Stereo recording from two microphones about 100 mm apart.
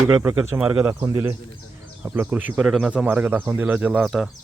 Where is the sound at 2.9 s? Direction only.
15° right (ahead or behind).